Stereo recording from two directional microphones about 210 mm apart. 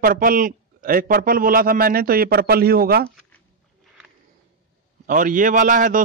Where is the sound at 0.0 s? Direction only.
40° right (ahead or behind).